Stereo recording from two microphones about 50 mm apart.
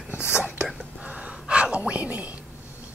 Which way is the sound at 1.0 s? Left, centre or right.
Right.